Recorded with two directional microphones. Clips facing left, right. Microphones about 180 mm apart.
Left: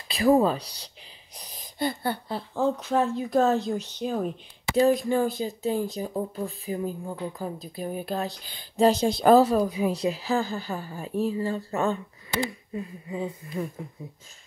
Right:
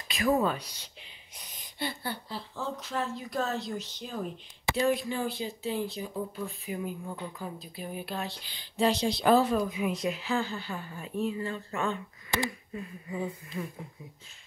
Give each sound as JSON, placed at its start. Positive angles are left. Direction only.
{"t": 0.1, "sound": "speech", "side_deg": 30}
{"t": 12.7, "sound": "speech", "side_deg": 25}